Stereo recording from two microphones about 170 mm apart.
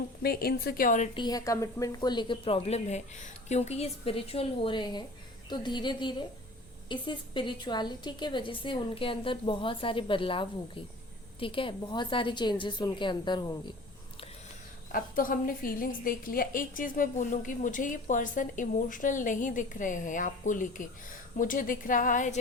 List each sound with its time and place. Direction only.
0.2 s a woman's voice: 65° left (ahead or behind)
1.1 s speech: 25° left (ahead or behind)
14.9 s a woman's voice: 55° left (ahead or behind)